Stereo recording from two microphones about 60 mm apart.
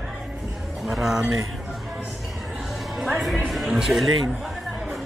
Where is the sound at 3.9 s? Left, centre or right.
Right.